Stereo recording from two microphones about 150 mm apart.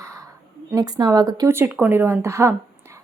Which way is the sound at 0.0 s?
20° right (ahead or behind).